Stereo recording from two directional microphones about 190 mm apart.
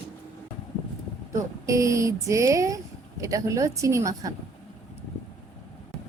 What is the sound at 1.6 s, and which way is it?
A woman's voice, 15° right (ahead or behind).